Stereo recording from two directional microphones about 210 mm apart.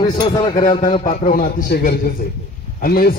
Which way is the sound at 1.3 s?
45° left (ahead or behind).